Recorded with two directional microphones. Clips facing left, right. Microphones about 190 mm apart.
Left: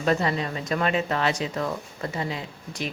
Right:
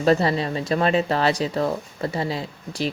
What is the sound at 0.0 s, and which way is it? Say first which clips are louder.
Speech: right 5 dB; 35° right (ahead or behind).